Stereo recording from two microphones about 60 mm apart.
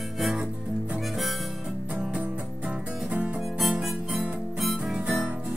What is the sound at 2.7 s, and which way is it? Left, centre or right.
Music, right.